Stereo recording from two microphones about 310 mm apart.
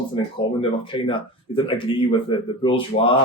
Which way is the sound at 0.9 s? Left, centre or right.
Centre.